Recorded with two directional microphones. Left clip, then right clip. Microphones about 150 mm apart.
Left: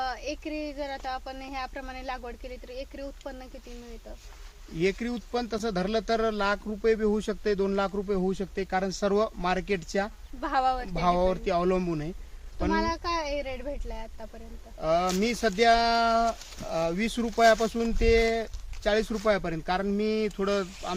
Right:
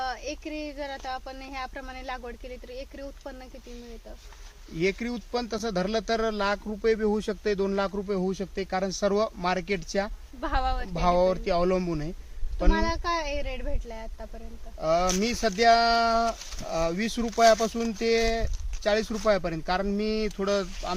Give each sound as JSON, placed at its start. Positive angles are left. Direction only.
{"t": 0.0, "sound": "speech", "side_deg": 10}
{"t": 4.8, "sound": "speech", "side_deg": -25}
{"t": 10.4, "sound": "speech", "side_deg": 15}
{"t": 10.9, "sound": "speech", "side_deg": -25}
{"t": 12.7, "sound": "speech", "side_deg": 10}
{"t": 14.8, "sound": "speech", "side_deg": -20}